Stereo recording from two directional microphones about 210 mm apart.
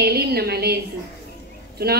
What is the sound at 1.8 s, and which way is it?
Speech, 45° right (ahead or behind).